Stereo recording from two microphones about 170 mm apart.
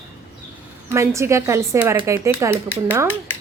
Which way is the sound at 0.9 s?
15° right (ahead or behind).